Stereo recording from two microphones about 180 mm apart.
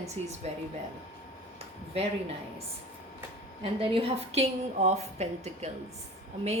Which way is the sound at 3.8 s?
30° right (ahead or behind).